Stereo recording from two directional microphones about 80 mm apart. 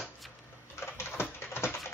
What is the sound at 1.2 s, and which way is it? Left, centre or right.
Typing, left.